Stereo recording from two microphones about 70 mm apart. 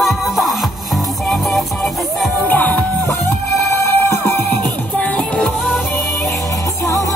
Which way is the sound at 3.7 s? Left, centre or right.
Left.